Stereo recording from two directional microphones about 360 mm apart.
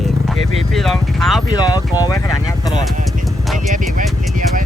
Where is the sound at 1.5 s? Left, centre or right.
Centre.